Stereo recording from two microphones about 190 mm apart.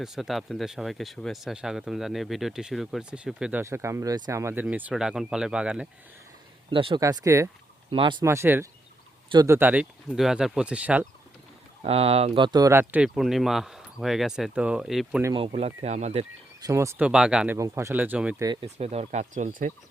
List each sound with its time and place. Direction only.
0.0 s speech: centre (ahead or behind)
6.7 s speech: 25° right (ahead or behind)
7.9 s speech: 25° right (ahead or behind)
8.2 s speech: 15° right (ahead or behind)
11.8 s speech: 30° right (ahead or behind); by 15.2 s 5° right (ahead or behind)
15.2 s speech: 20° right (ahead or behind)
15.5 s speech: 35° right (ahead or behind)
16.6 s speech: 15° right (ahead or behind)
18.6 s speech: 35° right (ahead or behind)